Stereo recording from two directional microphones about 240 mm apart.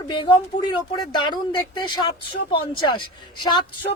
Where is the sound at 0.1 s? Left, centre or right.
Centre.